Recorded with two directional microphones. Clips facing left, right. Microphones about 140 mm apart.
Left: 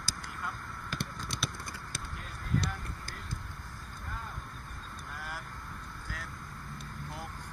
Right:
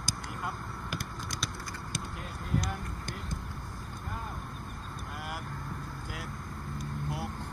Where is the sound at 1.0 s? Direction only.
25° left (ahead or behind).